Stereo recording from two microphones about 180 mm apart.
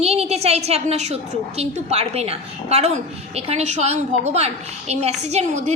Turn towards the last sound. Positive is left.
turn(degrees=-40)  # may be behind; listen again after turning